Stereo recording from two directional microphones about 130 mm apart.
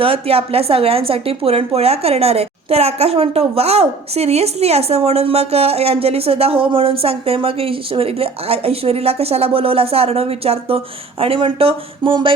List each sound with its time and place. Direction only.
0.0 s a woman's voice: 45° right (ahead or behind)